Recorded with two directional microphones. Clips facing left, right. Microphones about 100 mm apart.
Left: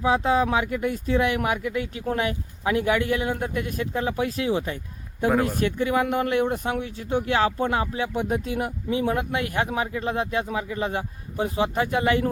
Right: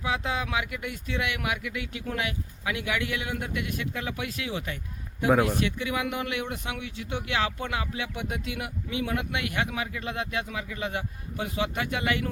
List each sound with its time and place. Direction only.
0.0 s speech: 35° left (ahead or behind)